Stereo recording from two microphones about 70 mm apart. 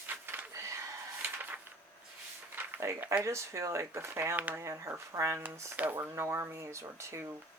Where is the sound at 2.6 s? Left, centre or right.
Right.